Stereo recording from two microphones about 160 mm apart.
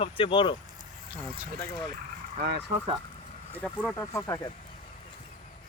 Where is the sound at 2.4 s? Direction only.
90° right.